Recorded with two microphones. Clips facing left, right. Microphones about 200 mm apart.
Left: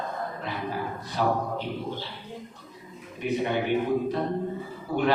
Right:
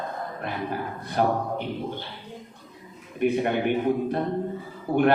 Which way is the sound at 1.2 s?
55° right (ahead or behind).